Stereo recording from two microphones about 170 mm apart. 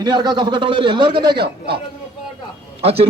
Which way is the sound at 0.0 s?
25° right (ahead or behind).